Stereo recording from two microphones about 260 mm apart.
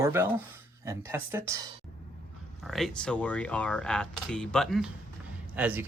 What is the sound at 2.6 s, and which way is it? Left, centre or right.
Speech, centre.